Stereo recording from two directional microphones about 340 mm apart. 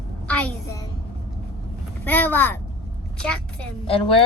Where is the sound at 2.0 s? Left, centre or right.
Centre.